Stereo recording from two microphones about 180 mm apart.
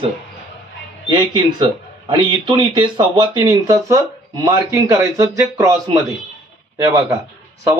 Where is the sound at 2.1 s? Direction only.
25° right (ahead or behind).